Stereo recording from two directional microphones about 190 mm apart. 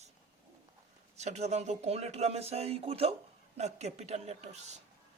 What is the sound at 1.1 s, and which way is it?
A woman's voice, 35° right (ahead or behind).